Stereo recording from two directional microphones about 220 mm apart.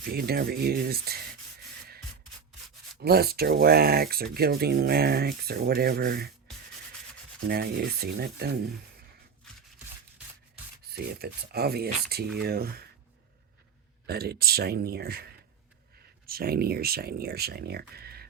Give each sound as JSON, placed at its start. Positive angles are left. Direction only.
{"t": 0.0, "sound": "speech", "side_deg": -45}
{"t": 3.0, "sound": "speech", "side_deg": -45}
{"t": 7.4, "sound": "speech", "side_deg": -45}
{"t": 10.9, "sound": "speech", "side_deg": -45}
{"t": 14.1, "sound": "speech", "side_deg": -45}